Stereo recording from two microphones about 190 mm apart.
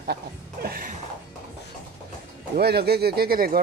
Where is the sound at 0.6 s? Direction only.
50° right (ahead or behind).